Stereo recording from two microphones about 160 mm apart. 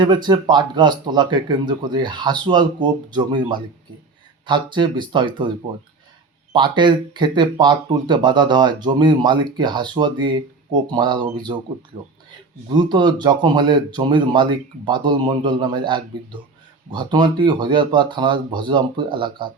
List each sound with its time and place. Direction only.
0.0 s speech: 30° right (ahead or behind)